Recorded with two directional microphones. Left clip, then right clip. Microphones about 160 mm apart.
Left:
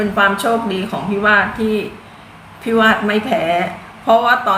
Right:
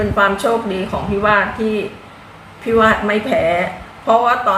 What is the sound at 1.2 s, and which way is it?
A woman's voice, 5° left (ahead or behind).